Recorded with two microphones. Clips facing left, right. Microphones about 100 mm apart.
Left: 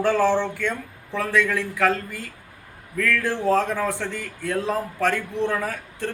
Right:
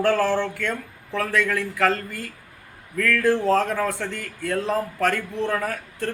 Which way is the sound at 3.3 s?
10° left (ahead or behind).